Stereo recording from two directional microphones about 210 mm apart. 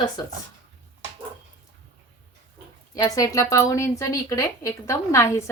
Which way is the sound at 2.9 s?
15° left (ahead or behind).